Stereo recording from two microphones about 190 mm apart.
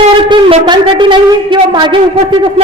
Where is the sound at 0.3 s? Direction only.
25° right (ahead or behind).